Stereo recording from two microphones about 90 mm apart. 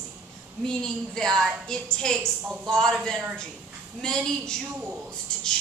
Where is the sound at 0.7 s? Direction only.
5° left (ahead or behind).